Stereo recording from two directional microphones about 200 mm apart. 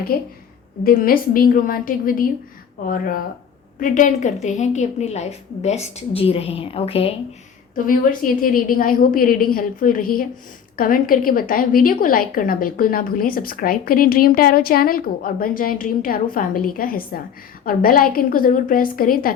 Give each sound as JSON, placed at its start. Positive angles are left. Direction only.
{"t": 0.1, "sound": "a woman's voice", "side_deg": 45}
{"t": 3.8, "sound": "a woman's voice", "side_deg": 40}
{"t": 7.9, "sound": "a woman's voice", "side_deg": 45}